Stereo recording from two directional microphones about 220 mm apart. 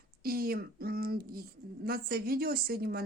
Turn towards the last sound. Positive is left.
turn(degrees=-45)  # may be behind; listen again after turning